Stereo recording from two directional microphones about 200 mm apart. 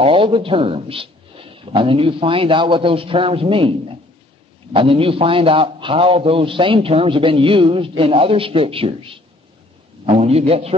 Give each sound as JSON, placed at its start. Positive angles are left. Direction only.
{"t": 0.0, "sound": "a man's voice", "side_deg": -25}